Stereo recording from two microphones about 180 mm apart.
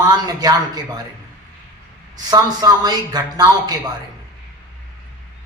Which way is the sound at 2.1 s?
20° right (ahead or behind).